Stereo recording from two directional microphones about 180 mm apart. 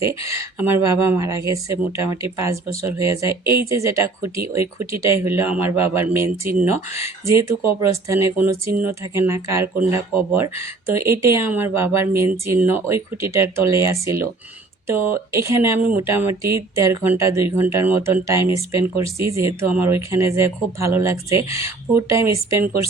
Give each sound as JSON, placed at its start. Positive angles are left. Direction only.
{"t": 0.0, "sound": "speech", "side_deg": -15}